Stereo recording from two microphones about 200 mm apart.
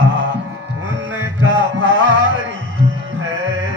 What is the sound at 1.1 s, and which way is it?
Music, 80° right.